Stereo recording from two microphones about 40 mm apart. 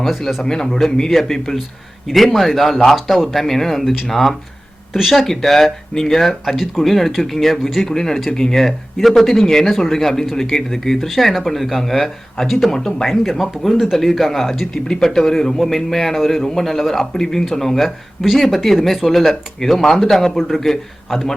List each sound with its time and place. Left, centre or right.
0.0 s speech: centre
0.4 s a man's voice: centre
11.1 s speech: centre
12.7 s a man's voice: centre
13.1 s speech: centre
14.8 s a man's voice: centre
17.8 s speech: centre